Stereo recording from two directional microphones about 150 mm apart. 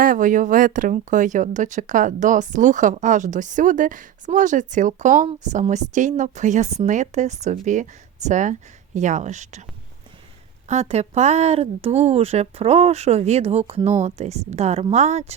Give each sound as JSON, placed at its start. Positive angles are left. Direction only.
{"t": 0.0, "sound": "speech", "side_deg": -65}
{"t": 10.7, "sound": "speech", "side_deg": -45}